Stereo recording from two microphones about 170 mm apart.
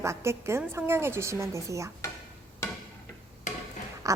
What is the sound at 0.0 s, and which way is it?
A woman's voice, 15° right (ahead or behind).